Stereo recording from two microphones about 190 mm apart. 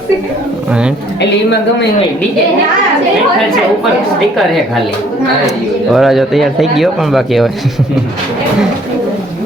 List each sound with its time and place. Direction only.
0.7 s speech: 5° right (ahead or behind)
1.2 s speech: 65° left (ahead or behind)
5.9 s speech: centre (ahead or behind)